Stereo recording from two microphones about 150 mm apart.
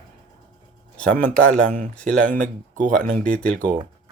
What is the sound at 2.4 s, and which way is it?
Speech, 60° right (ahead or behind).